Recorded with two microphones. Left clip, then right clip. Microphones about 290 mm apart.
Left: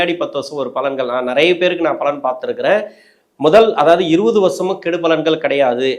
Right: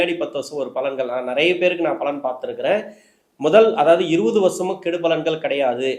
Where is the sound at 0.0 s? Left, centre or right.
Left.